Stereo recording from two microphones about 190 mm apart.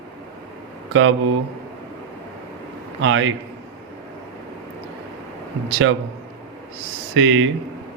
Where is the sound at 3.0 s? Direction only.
85° right.